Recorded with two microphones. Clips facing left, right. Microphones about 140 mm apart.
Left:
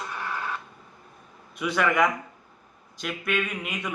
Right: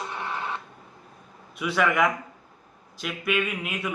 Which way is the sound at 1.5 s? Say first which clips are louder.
Even; centre (ahead or behind).